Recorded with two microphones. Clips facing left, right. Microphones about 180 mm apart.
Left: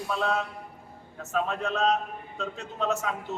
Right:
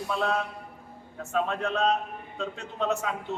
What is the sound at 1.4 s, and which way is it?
A man's voice, 5° left (ahead or behind).